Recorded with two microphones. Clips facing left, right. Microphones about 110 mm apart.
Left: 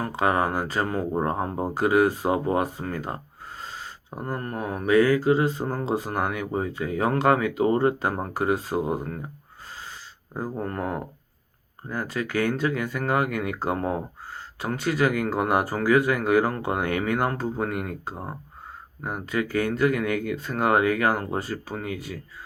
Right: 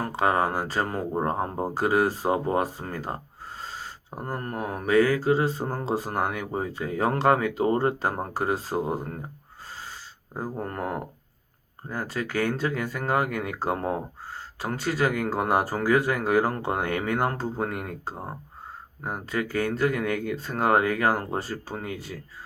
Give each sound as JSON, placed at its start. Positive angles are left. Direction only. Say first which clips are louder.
{"t": 0.0, "sound": "mantra", "louder": "even", "side_deg": -30}
{"t": 11.9, "sound": "mantra", "louder": "left 2 dB", "side_deg": -30}